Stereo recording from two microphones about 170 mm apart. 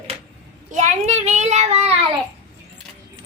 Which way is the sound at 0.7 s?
45° right (ahead or behind).